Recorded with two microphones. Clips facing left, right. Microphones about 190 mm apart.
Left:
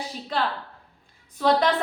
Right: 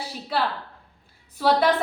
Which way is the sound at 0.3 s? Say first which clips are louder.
Right 1 dB; 5° right (ahead or behind).